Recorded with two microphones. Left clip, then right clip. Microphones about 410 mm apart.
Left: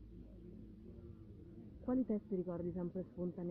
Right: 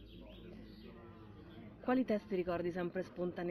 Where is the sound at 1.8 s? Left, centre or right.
Centre.